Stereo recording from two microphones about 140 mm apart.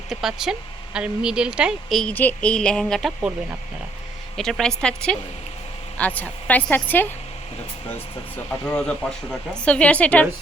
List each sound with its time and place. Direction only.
0.1 s a woman's voice: 5° right (ahead or behind)
4.4 s a woman's voice: 5° left (ahead or behind)
8.6 s a woman's voice: 5° left (ahead or behind)